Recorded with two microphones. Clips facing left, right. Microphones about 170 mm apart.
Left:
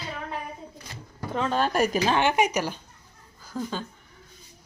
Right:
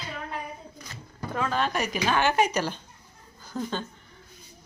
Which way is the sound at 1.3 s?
25° left (ahead or behind).